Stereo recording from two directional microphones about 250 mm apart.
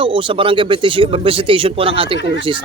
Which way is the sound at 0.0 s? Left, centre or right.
Right.